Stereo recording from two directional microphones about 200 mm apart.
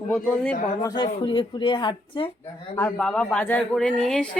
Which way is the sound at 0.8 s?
15° left (ahead or behind).